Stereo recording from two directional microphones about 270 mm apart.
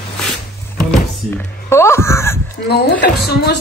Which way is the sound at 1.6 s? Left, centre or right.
Centre.